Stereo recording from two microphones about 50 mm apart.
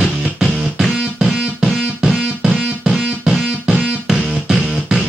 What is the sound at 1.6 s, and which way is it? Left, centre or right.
Music, centre.